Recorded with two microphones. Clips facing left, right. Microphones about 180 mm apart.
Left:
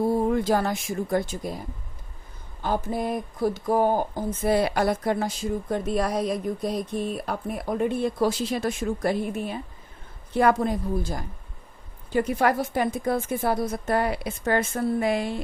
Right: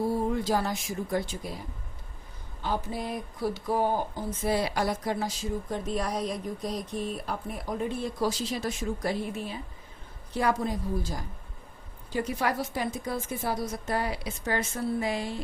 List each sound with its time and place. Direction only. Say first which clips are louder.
0.0 s speech: left 5 dB; 55° left (ahead or behind)
2.6 s speech: left 5 dB; 50° left (ahead or behind)